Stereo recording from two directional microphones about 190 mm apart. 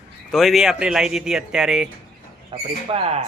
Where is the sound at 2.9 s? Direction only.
30° right (ahead or behind).